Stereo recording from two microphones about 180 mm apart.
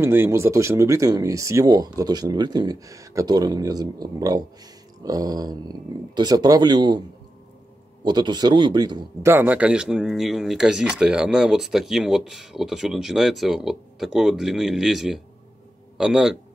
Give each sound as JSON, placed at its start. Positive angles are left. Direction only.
{"t": 0.0, "sound": "speech", "side_deg": -15}
{"t": 8.0, "sound": "speech", "side_deg": -25}
{"t": 9.3, "sound": "speech", "side_deg": -10}